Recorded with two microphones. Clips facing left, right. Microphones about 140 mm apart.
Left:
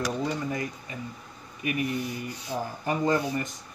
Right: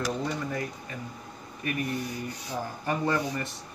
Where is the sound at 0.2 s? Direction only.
10° left (ahead or behind).